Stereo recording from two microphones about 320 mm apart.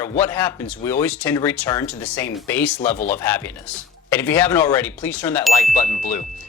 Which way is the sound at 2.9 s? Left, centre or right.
Left.